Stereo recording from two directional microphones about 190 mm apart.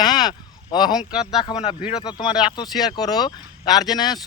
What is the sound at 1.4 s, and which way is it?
Speech, 30° left (ahead or behind).